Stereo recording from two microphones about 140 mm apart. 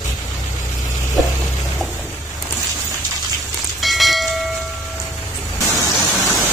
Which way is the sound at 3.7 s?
Centre (ahead or behind).